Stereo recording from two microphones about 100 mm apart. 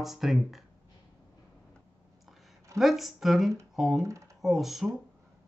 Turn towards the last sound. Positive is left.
turn(degrees=0)  # may be behind; listen again after turning